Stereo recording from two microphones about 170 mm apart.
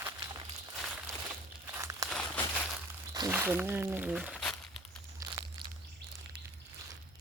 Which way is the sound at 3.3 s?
10° right (ahead or behind).